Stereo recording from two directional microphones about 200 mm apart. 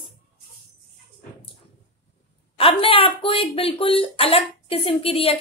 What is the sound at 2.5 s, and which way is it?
Speech, 25° left (ahead or behind).